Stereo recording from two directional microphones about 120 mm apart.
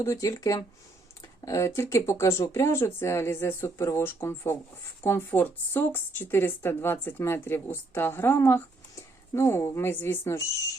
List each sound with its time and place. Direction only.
0.0 s speech: 25° left (ahead or behind)